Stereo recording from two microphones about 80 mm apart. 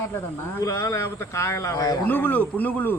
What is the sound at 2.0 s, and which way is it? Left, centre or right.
Speech, left.